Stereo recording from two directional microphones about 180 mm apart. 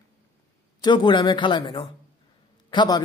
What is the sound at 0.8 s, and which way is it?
A man's voice, 25° left (ahead or behind).